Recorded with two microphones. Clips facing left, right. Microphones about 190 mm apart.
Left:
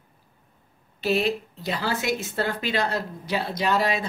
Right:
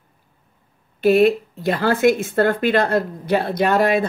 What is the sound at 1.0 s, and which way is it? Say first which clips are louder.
Speech: right 10 dB; 55° right (ahead or behind).